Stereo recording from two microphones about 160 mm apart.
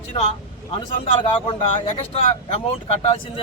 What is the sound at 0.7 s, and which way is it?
Speech, 35° left (ahead or behind).